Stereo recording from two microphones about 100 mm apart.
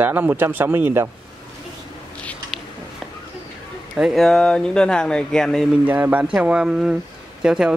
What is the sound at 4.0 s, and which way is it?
Speech, centre (ahead or behind).